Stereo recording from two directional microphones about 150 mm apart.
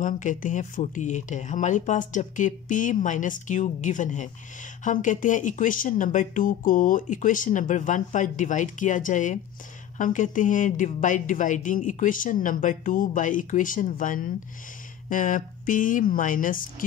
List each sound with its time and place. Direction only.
0.0 s speech: 60° left (ahead or behind)